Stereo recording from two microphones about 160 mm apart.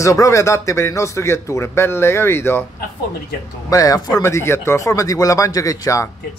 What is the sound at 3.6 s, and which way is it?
Speech, 20° left (ahead or behind).